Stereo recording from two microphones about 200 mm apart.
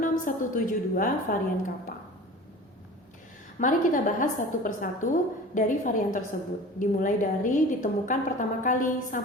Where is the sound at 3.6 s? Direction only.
40° left (ahead or behind).